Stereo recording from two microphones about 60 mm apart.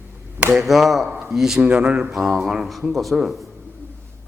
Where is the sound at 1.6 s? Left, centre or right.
Right.